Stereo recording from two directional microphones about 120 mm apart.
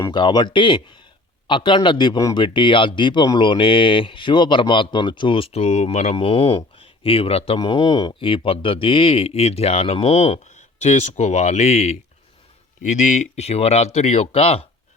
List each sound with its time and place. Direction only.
0.1 s speech: 40° left (ahead or behind); by 7.6 s 55° left (ahead or behind)
7.6 s speech: 40° left (ahead or behind); by 11.9 s 65° left (ahead or behind)
12.8 s speech: 90° left; by 14.7 s 55° left (ahead or behind)